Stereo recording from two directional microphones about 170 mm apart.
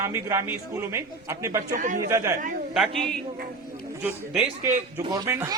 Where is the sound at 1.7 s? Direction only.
50° right (ahead or behind).